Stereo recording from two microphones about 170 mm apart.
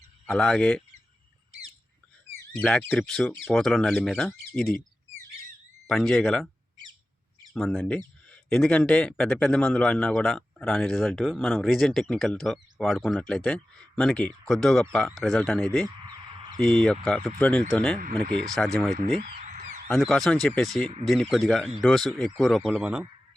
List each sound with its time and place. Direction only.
0.3 s speech: centre (ahead or behind)
2.6 s speech: 5° left (ahead or behind)
5.9 s speech: centre (ahead or behind)
7.5 s speech: centre (ahead or behind)
18.9 s frog: 50° right (ahead or behind)
19.9 s speech: centre (ahead or behind)